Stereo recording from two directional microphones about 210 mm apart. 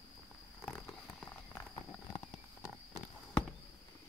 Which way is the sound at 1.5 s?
15° left (ahead or behind).